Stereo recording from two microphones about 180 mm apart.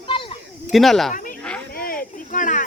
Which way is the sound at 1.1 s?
45° left (ahead or behind).